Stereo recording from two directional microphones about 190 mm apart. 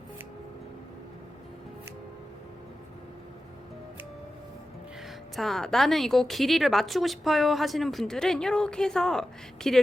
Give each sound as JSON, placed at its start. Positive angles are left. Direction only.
{"t": 5.4, "sound": "a woman's voice", "side_deg": 0}